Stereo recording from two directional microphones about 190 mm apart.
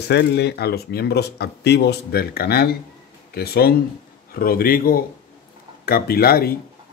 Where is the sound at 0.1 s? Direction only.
60° left (ahead or behind).